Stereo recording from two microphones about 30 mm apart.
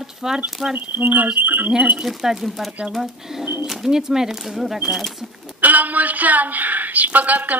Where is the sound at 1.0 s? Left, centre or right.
Right.